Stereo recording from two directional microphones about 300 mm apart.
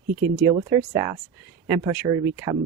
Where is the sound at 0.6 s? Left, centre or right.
Centre.